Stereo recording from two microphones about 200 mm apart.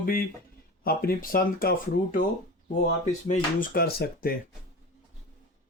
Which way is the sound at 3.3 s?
45° left (ahead or behind).